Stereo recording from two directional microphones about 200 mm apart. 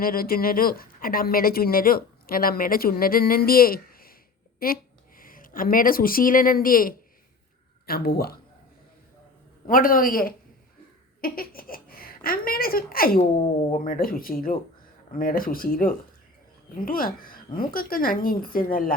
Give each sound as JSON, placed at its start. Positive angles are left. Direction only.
{"t": 0.0, "sound": "speech", "side_deg": 45}
{"t": 9.6, "sound": "speech", "side_deg": 45}
{"t": 13.1, "sound": "speech", "side_deg": 35}